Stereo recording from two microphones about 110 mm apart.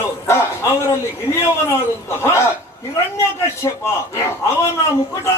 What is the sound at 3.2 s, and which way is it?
Speech, 25° left (ahead or behind).